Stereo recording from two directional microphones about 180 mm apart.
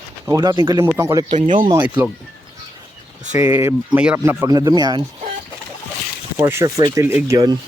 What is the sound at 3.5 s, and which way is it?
Speech, 15° right (ahead or behind).